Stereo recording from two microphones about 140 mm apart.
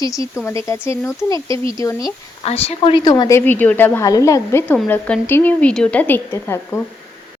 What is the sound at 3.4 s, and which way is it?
A woman's voice, 10° left (ahead or behind).